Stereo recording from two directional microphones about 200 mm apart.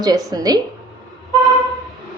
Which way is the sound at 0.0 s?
20° right (ahead or behind).